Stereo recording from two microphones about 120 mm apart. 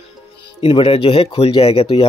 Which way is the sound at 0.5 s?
50° left (ahead or behind).